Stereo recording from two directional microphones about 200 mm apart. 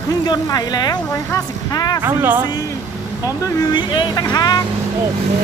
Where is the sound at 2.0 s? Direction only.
10° right (ahead or behind).